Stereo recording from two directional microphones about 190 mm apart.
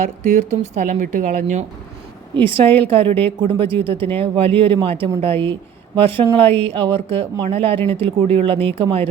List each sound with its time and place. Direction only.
0.2 s speech: 40° right (ahead or behind)
2.3 s speech: 30° right (ahead or behind)
6.4 s speech: 10° left (ahead or behind)
6.7 s speech: 30° right (ahead or behind)